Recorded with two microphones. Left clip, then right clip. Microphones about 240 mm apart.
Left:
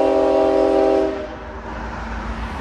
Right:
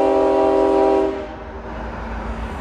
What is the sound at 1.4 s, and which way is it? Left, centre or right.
Train, left.